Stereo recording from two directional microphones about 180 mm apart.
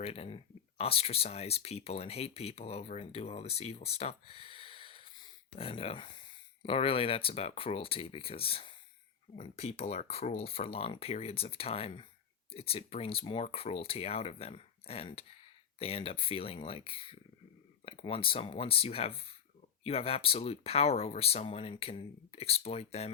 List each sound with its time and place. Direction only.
0.0 s speech: 35° left (ahead or behind)